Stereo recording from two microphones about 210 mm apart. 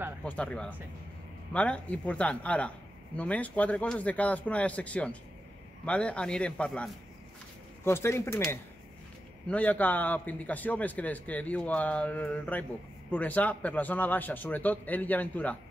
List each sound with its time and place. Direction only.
0.2 s a man's voice: 5° left (ahead or behind)
9.5 s a man's voice: 5° left (ahead or behind)